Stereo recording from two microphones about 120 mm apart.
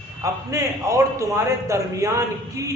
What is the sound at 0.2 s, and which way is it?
A man's voice, 25° right (ahead or behind).